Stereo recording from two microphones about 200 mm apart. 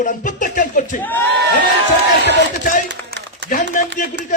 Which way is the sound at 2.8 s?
60° right (ahead or behind).